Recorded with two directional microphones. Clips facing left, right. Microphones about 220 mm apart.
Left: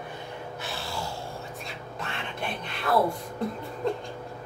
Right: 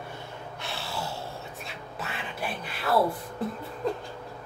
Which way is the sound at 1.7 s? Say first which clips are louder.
Left 1 dB; 5° right (ahead or behind).